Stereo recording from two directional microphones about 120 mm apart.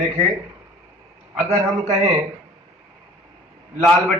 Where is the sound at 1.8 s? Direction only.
65° right (ahead or behind).